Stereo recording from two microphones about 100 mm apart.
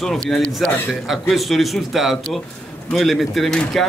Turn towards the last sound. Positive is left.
turn(degrees=5)  # may be behind; listen again after turning